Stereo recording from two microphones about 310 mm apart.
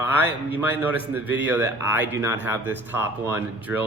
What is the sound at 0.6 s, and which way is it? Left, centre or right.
A man's voice, centre.